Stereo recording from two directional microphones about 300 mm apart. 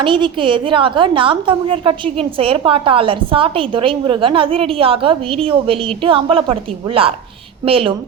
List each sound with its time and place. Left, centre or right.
0.0 s a woman's voice: centre